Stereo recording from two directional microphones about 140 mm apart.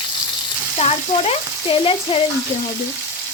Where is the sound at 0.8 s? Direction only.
45° left (ahead or behind).